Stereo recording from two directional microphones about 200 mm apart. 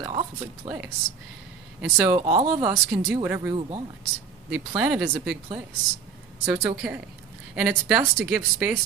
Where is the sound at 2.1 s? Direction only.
30° right (ahead or behind).